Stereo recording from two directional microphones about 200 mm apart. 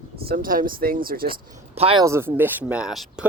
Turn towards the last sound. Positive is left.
turn(degrees=-5)  # may be behind; listen again after turning